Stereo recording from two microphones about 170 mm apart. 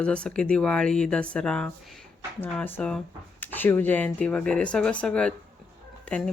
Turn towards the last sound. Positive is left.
turn(degrees=10)  # may be behind; listen again after turning